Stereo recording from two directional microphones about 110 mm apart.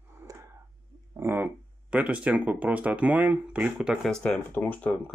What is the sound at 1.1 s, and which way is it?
Speech, 20° right (ahead or behind).